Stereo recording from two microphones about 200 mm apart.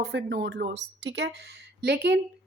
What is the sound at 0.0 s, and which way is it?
Speech, 60° right (ahead or behind).